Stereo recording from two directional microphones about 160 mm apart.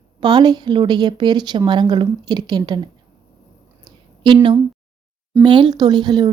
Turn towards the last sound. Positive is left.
turn(degrees=-25)  # may be behind; listen again after turning